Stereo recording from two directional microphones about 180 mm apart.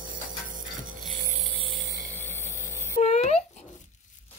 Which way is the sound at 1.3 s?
30° right (ahead or behind).